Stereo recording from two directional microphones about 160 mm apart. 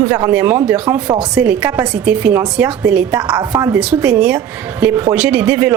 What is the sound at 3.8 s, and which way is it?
A woman's voice, 5° right (ahead or behind).